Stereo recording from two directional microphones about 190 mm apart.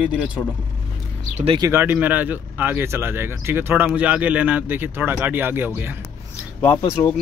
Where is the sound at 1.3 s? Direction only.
30° right (ahead or behind).